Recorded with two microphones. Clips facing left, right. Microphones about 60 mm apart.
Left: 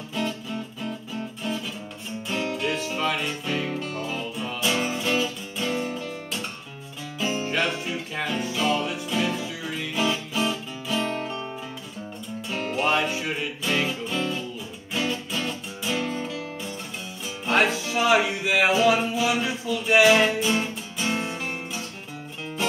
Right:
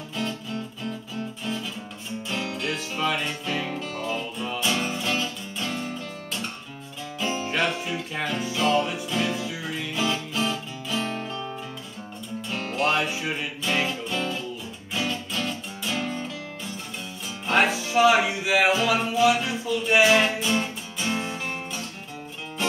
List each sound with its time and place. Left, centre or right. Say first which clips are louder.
0.1 s music: left 2 dB; centre
2.2 s music: left 3 dB; centre
12.4 s music: even; centre